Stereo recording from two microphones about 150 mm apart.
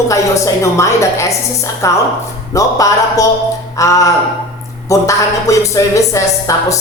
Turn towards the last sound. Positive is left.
turn(degrees=20)  # may be behind; listen again after turning